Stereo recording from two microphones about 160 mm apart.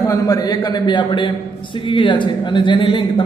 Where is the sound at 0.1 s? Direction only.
20° left (ahead or behind).